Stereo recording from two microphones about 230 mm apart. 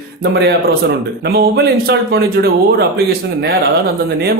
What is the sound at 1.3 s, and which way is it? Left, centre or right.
Speech, right.